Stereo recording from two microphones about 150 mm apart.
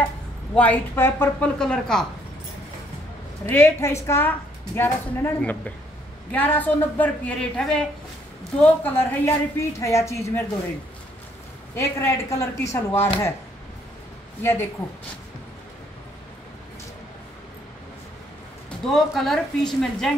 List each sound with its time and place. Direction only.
0.6 s a woman's voice: 15° left (ahead or behind)
1.6 s a woman's voice: 5° left (ahead or behind)
3.4 s a woman's voice: 15° left (ahead or behind)
11.7 s a woman's voice: 20° left (ahead or behind)
14.4 s a woman's voice: 15° left (ahead or behind)
18.9 s a woman's voice: centre (ahead or behind)